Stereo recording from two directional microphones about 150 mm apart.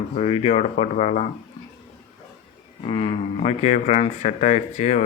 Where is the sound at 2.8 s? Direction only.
35° left (ahead or behind).